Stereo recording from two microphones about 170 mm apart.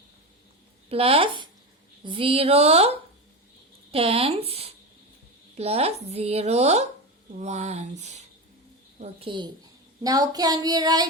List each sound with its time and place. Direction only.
0.9 s speech: 35° right (ahead or behind)
9.2 s child singing: 30° right (ahead or behind)